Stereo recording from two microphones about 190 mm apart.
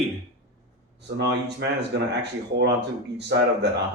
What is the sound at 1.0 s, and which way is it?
Speech, 65° right (ahead or behind).